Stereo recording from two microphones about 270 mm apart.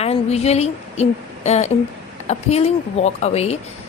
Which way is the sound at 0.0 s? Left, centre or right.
Left.